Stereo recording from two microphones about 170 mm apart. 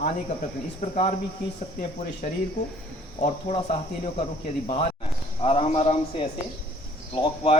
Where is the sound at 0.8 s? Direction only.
50° left (ahead or behind).